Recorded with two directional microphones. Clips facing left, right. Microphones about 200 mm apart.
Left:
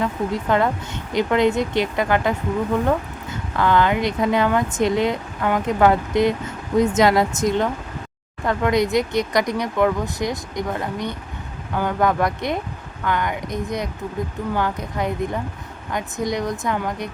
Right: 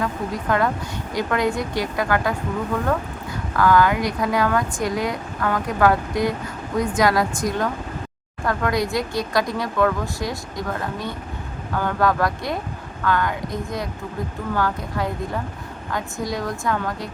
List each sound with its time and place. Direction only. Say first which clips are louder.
0.0 s speech: left 3 dB; 25° left (ahead or behind)
3.5 s speech: right 1 dB; 25° left (ahead or behind)